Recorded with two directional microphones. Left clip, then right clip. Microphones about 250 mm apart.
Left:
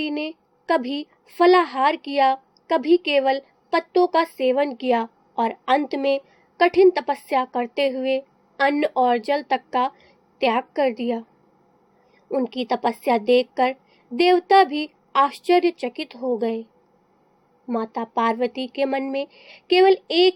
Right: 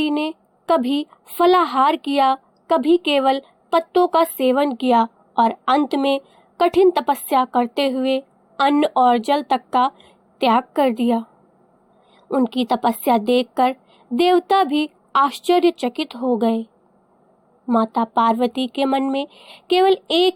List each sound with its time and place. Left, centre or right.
0.0 s a woman's voice: right
12.3 s a woman's voice: right
17.7 s a woman's voice: right